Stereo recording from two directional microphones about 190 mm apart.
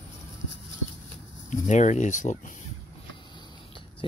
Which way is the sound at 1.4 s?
40° left (ahead or behind).